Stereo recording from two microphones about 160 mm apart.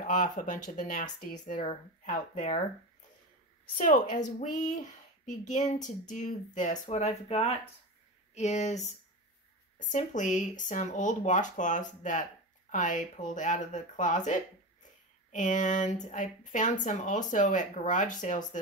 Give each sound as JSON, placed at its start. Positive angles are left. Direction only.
{"t": 0.0, "sound": "speech", "side_deg": 55}
{"t": 3.7, "sound": "speech", "side_deg": 55}